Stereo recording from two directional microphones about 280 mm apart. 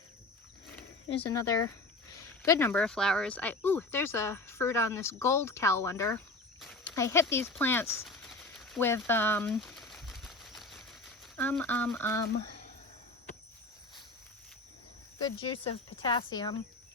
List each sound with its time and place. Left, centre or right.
1.0 s speech: centre
6.9 s a sound: centre
11.3 s speech: centre
15.2 s speech: centre